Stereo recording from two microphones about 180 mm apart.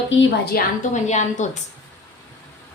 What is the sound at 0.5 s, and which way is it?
A woman's voice, 40° left (ahead or behind).